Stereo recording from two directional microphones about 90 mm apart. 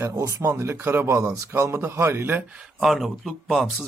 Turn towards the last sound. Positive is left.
turn(degrees=0)  # may be behind; listen again after turning